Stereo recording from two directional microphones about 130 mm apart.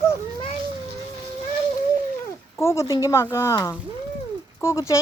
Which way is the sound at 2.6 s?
20° left (ahead or behind).